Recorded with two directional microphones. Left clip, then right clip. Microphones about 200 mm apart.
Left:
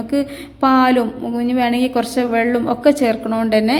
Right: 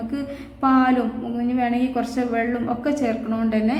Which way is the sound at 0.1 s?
35° left (ahead or behind).